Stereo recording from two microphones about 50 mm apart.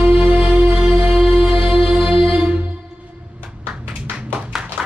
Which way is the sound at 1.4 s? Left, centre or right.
Centre.